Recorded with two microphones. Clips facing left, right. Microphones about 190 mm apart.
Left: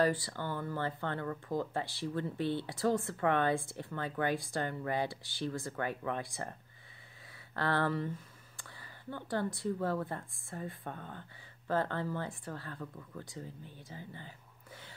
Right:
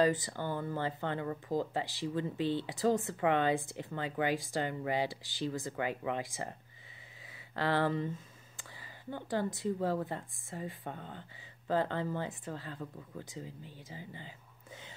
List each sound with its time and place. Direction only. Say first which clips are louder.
0.0 s speech: right 1 dB; 20° right (ahead or behind)
7.5 s speech: right 1 dB; 15° right (ahead or behind)